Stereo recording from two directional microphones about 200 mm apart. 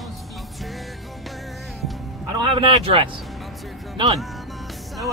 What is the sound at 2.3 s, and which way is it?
Speech, 25° right (ahead or behind).